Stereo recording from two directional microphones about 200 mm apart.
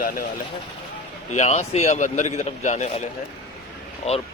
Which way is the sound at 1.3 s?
35° left (ahead or behind).